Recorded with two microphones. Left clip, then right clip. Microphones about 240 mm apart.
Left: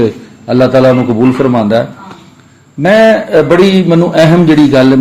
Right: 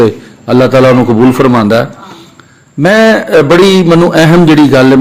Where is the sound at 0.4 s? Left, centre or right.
Right.